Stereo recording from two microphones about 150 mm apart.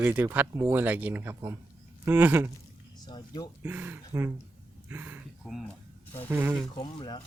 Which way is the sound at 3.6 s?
10° right (ahead or behind).